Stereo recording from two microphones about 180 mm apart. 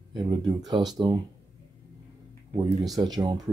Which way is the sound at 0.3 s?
20° right (ahead or behind).